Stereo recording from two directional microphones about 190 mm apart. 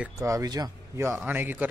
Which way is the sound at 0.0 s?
15° right (ahead or behind).